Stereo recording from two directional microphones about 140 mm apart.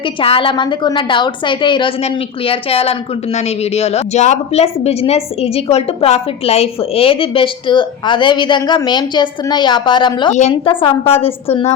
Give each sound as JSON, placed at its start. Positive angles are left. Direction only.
{"t": 0.0, "sound": "a woman's voice", "side_deg": 40}